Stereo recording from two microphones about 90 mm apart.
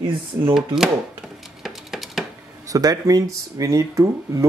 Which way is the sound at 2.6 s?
40° right (ahead or behind).